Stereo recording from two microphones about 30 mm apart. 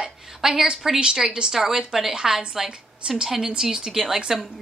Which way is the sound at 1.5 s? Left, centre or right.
Centre.